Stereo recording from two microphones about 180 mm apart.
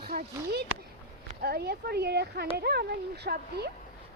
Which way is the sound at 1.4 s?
60° right (ahead or behind).